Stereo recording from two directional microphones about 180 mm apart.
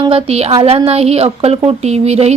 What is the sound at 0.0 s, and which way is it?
Speech, 30° right (ahead or behind).